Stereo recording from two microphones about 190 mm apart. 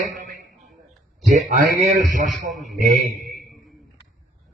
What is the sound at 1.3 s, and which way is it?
A man's voice, 40° right (ahead or behind).